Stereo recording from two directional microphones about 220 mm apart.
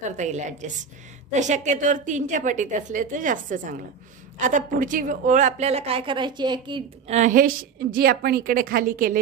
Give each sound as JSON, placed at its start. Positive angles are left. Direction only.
{"t": 0.2, "sound": "a woman's voice", "side_deg": -30}